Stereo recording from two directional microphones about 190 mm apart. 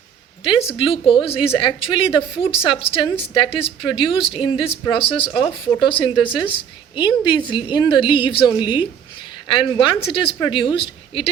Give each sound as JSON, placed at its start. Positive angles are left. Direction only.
{"t": 0.4, "sound": "speech", "side_deg": 30}